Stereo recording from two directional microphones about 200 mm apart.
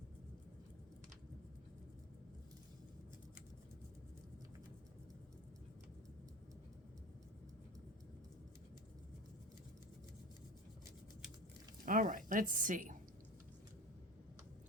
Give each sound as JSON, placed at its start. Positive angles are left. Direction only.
{"t": 11.9, "sound": "a woman's voice", "side_deg": -45}